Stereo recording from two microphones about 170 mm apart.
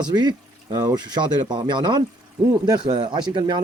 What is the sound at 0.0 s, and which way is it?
Speech, 25° right (ahead or behind).